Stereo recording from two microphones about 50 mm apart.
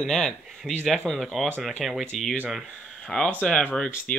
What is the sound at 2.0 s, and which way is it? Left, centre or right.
Speech, centre.